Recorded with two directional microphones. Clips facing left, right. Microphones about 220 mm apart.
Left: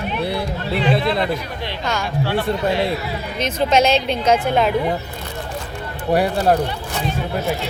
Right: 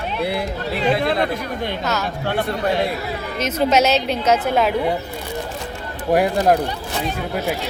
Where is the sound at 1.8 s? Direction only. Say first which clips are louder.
Left 3 dB; 5° right (ahead or behind).